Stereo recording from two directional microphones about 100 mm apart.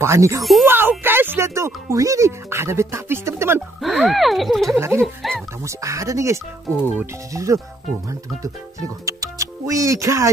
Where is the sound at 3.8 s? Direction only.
Centre (ahead or behind).